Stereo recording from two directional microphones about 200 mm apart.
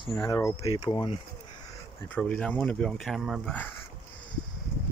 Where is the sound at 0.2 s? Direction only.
15° left (ahead or behind).